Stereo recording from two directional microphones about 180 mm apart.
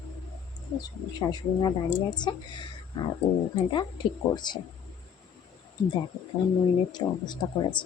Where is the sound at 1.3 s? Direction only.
25° left (ahead or behind).